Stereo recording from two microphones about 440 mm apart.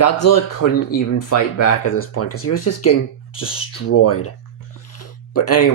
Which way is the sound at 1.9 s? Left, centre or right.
Left.